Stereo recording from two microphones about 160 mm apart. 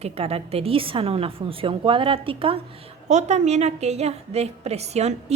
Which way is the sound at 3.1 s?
45° right (ahead or behind).